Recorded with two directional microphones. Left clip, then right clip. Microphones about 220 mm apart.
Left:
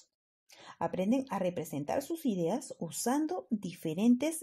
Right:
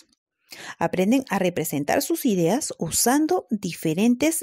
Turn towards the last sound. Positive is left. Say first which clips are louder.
# right 9 dB
turn(degrees=-35)  # may be behind; listen again after turning